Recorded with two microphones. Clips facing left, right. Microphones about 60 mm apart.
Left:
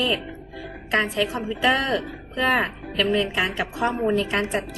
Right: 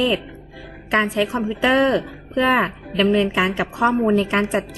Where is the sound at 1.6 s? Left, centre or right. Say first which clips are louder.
Right 4 dB; right.